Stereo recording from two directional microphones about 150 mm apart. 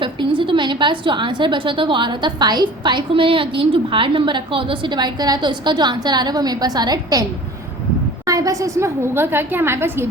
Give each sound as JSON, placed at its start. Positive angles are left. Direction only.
{"t": 0.0, "sound": "a woman's voice", "side_deg": -35}
{"t": 8.3, "sound": "a woman's voice", "side_deg": -25}